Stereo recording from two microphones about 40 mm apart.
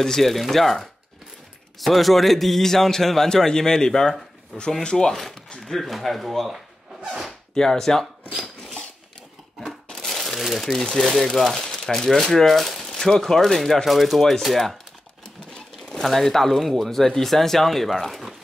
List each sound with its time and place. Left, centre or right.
0.0 s a man's voice: centre
7.5 s a man's voice: centre
9.7 s crumpling: centre
10.6 s a man's voice: centre
15.9 s speech: centre